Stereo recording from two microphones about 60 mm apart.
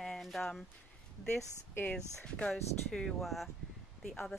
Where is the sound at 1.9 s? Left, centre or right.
Centre.